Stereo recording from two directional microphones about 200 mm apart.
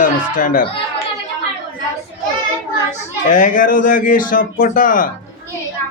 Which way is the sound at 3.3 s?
40° left (ahead or behind).